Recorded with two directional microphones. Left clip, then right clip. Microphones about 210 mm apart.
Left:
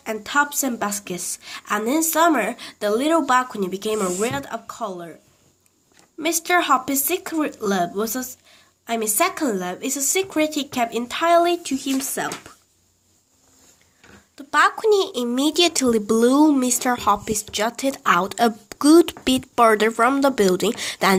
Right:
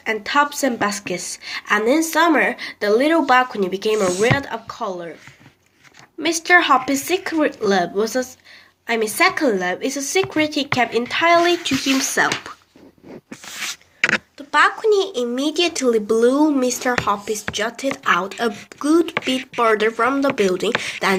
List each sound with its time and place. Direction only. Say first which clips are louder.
0.0 s a woman's voice: right 3 dB; 45° left (ahead or behind)
6.1 s a woman's voice: right 5 dB; 45° left (ahead or behind); by 12.5 s 30° left (ahead or behind)
14.3 s speech: left 3 dB; 55° left (ahead or behind)